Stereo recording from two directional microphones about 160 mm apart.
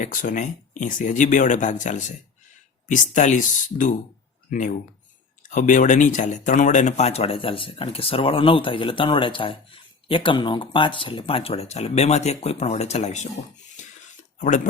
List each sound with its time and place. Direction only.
0.0 s speech: 55° left (ahead or behind)
14.3 s speech: 50° left (ahead or behind)